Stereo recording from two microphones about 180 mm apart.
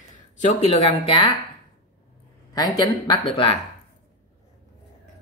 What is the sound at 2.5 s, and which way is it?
A woman's voice, 20° left (ahead or behind).